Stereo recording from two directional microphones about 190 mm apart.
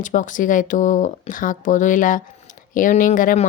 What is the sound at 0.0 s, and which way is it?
Speech, 40° left (ahead or behind).